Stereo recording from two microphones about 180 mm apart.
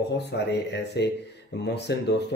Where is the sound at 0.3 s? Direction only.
70° left (ahead or behind).